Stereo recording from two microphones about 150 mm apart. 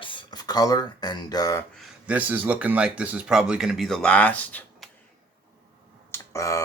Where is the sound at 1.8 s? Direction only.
5° right (ahead or behind); by 4.7 s 10° left (ahead or behind).